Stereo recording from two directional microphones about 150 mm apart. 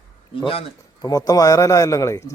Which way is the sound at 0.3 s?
35° left (ahead or behind).